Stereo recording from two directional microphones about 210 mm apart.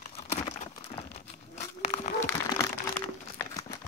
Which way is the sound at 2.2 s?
10° left (ahead or behind).